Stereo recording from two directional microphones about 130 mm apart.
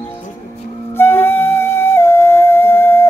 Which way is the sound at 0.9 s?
15° left (ahead or behind).